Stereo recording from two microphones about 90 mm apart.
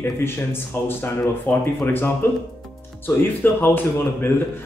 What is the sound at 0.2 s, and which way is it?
Speech, 25° left (ahead or behind).